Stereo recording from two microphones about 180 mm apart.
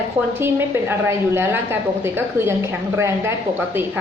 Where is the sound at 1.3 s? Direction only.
15° right (ahead or behind).